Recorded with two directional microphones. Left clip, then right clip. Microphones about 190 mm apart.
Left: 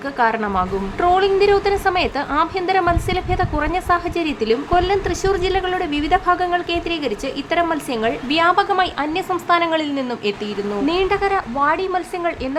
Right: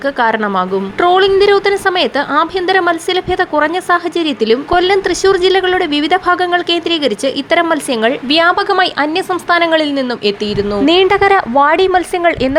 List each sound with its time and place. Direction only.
0.2 s a woman's voice: 25° right (ahead or behind)
10.8 s a woman's voice: 35° right (ahead or behind)